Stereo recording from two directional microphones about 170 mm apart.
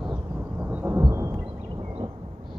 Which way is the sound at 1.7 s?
30° right (ahead or behind).